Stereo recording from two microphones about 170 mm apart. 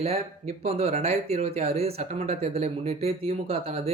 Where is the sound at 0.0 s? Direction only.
40° right (ahead or behind).